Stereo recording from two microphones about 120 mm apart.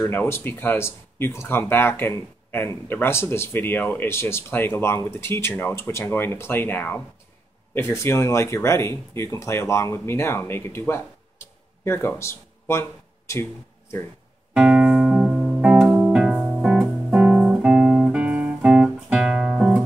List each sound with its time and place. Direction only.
0.0 s speech: 20° left (ahead or behind)
14.5 s music: 10° right (ahead or behind)